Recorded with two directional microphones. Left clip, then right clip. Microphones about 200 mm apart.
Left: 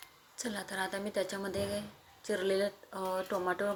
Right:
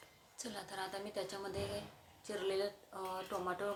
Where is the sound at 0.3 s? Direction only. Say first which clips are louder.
Left 7 dB; 25° left (ahead or behind).